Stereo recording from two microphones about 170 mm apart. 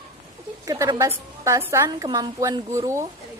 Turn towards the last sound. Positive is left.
turn(degrees=-15)  # may be behind; listen again after turning